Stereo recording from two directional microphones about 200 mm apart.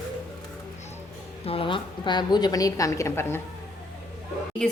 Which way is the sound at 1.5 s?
25° left (ahead or behind).